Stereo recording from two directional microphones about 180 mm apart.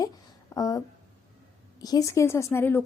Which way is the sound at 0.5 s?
20° left (ahead or behind).